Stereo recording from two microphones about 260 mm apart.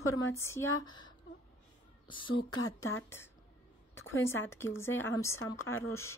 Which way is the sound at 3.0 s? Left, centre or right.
Centre.